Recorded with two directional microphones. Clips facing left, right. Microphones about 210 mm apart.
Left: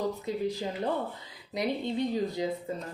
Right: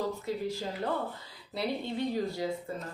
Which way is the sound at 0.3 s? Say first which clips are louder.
Left 2 dB; 20° left (ahead or behind).